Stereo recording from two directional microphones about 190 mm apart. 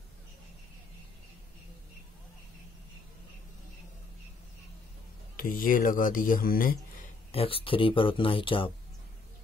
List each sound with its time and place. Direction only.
5.3 s speech: 50° left (ahead or behind)
7.3 s speech: 30° left (ahead or behind)